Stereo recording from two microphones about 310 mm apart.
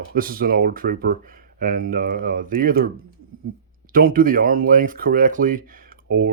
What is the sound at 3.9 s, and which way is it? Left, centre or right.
Speech, right.